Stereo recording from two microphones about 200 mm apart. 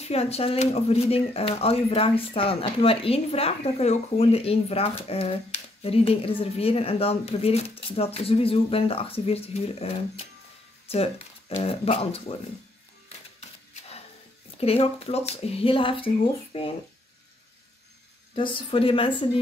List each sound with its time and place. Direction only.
0.0 s speech: 30° left (ahead or behind)
14.6 s speech: 30° left (ahead or behind)
18.3 s speech: 25° left (ahead or behind)